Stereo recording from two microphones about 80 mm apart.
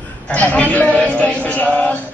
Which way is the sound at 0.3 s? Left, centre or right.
Centre.